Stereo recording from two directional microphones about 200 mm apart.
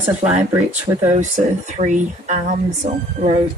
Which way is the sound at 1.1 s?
35° right (ahead or behind).